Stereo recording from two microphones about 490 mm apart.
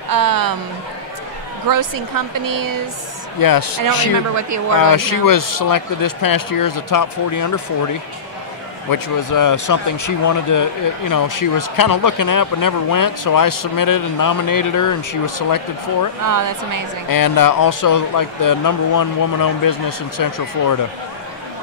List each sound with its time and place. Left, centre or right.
0.1 s a sound: right
1.7 s speech: right
3.3 s speech: left
4.7 s speech: left
8.9 s speech: left
16.3 s speech: right
17.1 s speech: left